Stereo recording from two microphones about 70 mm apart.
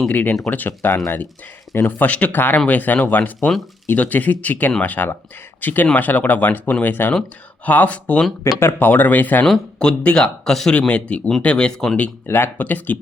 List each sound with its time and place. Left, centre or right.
0.1 s speech: left
2.0 s speech: centre
8.5 s speech: left
9.5 s speech: centre
10.8 s speech: centre
12.2 s speech: left